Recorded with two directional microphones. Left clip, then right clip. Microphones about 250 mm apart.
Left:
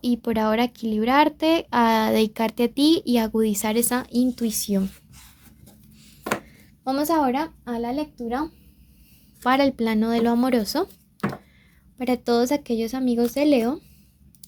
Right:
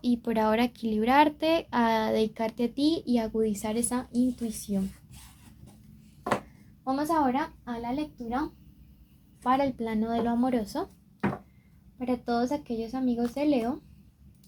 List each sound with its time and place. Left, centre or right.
0.0 s speech: left
6.8 s a woman's voice: left
9.4 s speech: left
11.9 s a woman's voice: left